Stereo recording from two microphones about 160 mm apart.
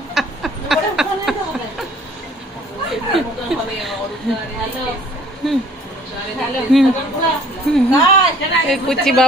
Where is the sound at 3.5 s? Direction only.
5° right (ahead or behind).